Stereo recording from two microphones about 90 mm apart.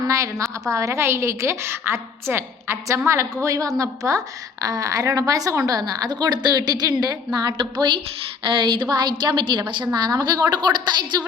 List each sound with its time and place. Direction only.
0.0 s a woman's voice: 40° right (ahead or behind); by 9.8 s 60° right (ahead or behind)
9.9 s a woman's voice: 50° right (ahead or behind)